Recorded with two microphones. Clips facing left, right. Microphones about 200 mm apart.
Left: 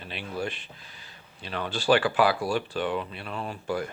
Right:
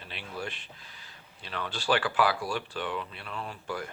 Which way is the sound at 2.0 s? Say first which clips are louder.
Left 4 dB; 25° left (ahead or behind).